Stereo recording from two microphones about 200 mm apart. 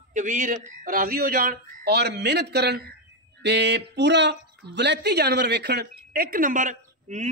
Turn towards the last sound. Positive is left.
turn(degrees=-35)  # may be behind; listen again after turning